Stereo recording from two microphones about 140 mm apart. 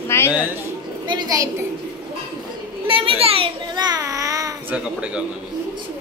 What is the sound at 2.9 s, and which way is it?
Child singing, 40° right (ahead or behind).